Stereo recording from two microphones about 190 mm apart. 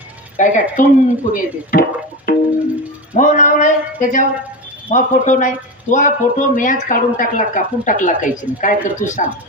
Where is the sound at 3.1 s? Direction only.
40° left (ahead or behind).